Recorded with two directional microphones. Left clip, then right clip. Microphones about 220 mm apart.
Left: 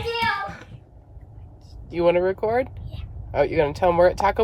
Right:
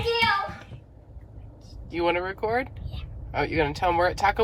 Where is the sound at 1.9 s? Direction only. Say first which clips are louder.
Left 6 dB; 40° left (ahead or behind).